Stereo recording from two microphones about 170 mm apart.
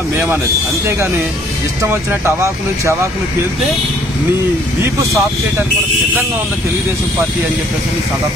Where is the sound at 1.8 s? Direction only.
15° right (ahead or behind).